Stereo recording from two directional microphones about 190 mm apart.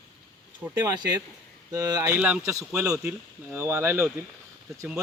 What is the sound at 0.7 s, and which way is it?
Speech, 20° right (ahead or behind).